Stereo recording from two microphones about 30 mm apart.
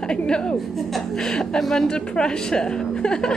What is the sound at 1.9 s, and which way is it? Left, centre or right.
A woman's voice, left.